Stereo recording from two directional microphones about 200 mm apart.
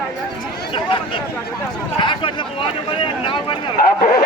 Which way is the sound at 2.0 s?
25° left (ahead or behind).